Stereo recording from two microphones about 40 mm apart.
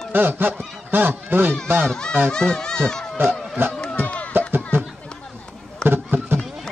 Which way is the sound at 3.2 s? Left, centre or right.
Right.